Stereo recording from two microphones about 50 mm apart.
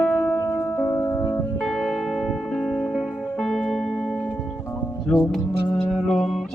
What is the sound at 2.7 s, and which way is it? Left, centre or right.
Music, centre.